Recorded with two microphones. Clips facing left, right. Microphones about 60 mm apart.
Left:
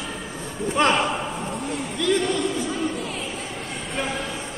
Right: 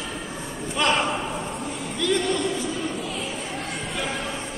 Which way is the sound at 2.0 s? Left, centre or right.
Centre.